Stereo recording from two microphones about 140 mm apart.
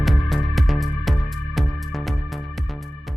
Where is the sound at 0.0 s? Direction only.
Centre (ahead or behind).